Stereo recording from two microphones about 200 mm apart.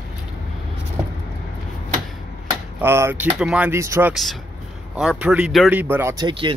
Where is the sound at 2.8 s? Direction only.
10° right (ahead or behind).